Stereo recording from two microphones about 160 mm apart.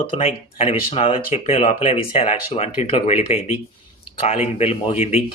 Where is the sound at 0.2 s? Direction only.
35° left (ahead or behind).